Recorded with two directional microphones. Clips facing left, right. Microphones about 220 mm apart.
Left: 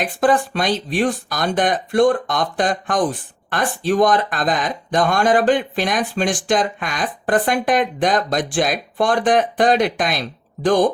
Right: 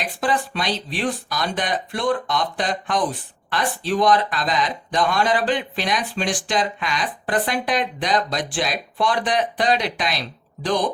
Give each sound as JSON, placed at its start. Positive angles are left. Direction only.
{"t": 0.0, "sound": "speech", "side_deg": 50}